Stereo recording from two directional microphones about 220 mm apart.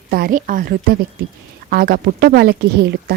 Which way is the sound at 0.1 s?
40° right (ahead or behind).